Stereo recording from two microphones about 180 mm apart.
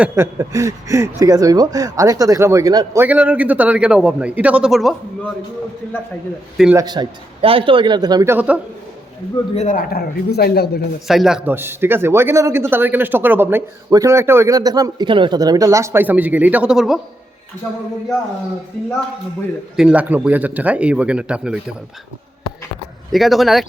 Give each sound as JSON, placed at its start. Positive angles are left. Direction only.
{"t": 0.0, "sound": "a man's voice", "side_deg": -15}
{"t": 6.7, "sound": "a man's voice", "side_deg": -25}
{"t": 9.6, "sound": "a man's voice", "side_deg": 45}
{"t": 11.1, "sound": "a man's voice", "side_deg": 0}
{"t": 19.7, "sound": "a man's voice", "side_deg": -5}
{"t": 23.1, "sound": "speech", "side_deg": 0}